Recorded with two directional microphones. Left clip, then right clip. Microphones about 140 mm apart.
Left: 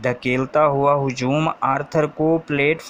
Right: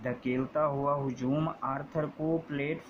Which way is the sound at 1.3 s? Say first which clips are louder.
Left 12 dB; 25° left (ahead or behind).